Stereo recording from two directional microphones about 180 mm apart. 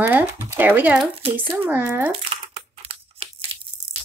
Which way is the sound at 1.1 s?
30° right (ahead or behind).